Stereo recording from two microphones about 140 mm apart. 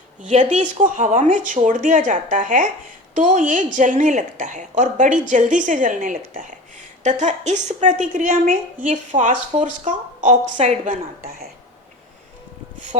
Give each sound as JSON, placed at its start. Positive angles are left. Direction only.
{"t": 0.3, "sound": "a woman's voice", "side_deg": -55}
{"t": 7.0, "sound": "a woman's voice", "side_deg": -60}